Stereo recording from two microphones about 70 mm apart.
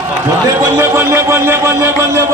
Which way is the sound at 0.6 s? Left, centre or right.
Right.